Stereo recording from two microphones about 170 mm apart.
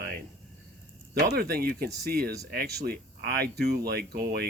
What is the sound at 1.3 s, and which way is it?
Speech, 65° right (ahead or behind).